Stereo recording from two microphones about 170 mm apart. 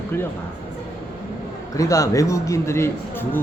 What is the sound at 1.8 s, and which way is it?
A man's voice, 20° left (ahead or behind).